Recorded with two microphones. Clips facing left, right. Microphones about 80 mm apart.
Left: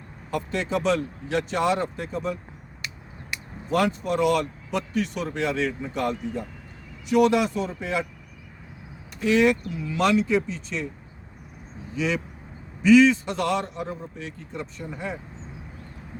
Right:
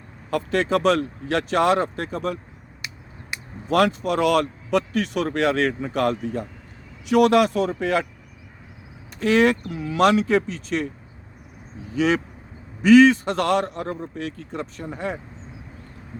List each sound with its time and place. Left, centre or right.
0.3 s speech: right
2.8 s a sound: right
3.7 s a man's voice: right
9.2 s a man's voice: right
11.9 s a man's voice: right